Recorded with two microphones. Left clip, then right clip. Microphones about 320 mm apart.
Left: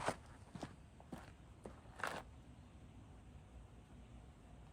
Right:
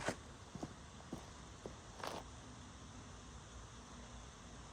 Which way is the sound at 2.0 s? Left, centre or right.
Left.